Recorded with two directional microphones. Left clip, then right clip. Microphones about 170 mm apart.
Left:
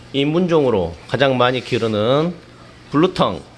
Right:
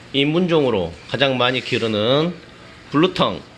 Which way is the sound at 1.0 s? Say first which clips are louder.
Left 2 dB; 20° left (ahead or behind).